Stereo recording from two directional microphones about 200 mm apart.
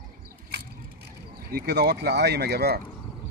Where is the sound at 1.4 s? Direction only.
50° right (ahead or behind).